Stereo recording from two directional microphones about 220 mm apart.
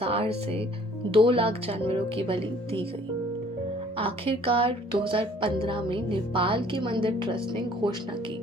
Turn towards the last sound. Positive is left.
turn(degrees=-20)  # may be behind; listen again after turning